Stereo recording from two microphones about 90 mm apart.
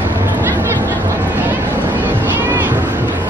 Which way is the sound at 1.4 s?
20° right (ahead or behind).